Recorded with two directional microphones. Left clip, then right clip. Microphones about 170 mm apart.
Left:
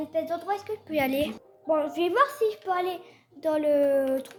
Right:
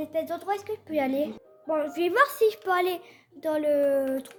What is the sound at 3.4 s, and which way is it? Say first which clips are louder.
Speech: left 1 dB; 5° right (ahead or behind).